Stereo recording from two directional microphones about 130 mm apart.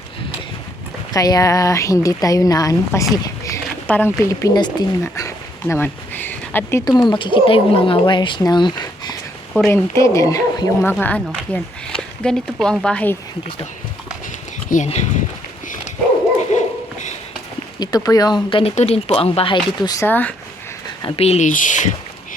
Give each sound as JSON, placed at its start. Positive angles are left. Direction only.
{"t": 1.1, "sound": "a woman's voice", "side_deg": 25}
{"t": 3.8, "sound": "speech", "side_deg": 15}
{"t": 6.8, "sound": "speech", "side_deg": 35}
{"t": 9.6, "sound": "a woman's voice", "side_deg": 20}
{"t": 10.9, "sound": "speech", "side_deg": 10}
{"t": 14.8, "sound": "speech", "side_deg": 60}
{"t": 16.6, "sound": "dog", "side_deg": 65}
{"t": 17.7, "sound": "speech", "side_deg": 30}
{"t": 18.6, "sound": "speech", "side_deg": 55}
{"t": 20.1, "sound": "speech", "side_deg": 15}
{"t": 21.2, "sound": "speech", "side_deg": 55}
{"t": 21.4, "sound": "speech", "side_deg": 85}